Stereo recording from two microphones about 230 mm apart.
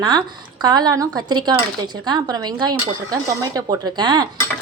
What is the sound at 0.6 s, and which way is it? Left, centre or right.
Speech, centre.